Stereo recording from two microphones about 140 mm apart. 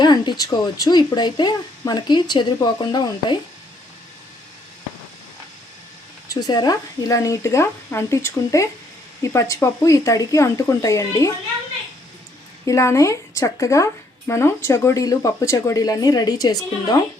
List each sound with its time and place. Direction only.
0.0 s speech: 30° left (ahead or behind)
6.2 s speech: 30° left (ahead or behind)
12.6 s speech: 20° left (ahead or behind)